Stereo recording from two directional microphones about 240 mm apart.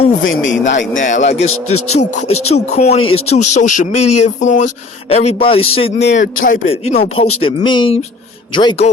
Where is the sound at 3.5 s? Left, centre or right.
Left.